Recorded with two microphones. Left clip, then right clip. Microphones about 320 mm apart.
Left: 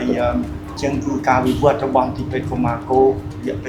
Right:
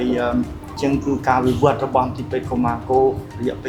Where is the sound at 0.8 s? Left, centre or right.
Right.